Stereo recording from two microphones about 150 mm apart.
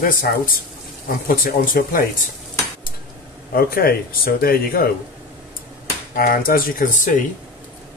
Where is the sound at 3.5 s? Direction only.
80° left.